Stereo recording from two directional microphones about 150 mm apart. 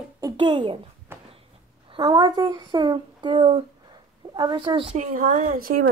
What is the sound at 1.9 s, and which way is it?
Speech, 30° right (ahead or behind).